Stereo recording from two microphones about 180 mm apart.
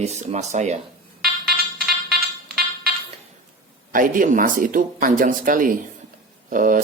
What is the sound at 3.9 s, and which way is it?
Speech, 50° right (ahead or behind).